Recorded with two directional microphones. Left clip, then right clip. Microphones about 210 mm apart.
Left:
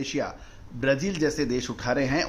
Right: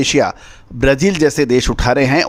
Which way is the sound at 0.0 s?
50° right (ahead or behind).